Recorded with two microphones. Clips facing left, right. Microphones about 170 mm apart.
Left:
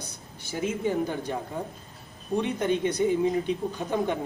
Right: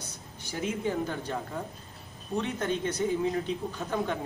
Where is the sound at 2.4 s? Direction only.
15° left (ahead or behind).